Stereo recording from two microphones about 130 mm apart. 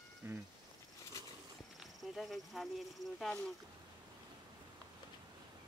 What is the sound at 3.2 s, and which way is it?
Speech, 5° left (ahead or behind).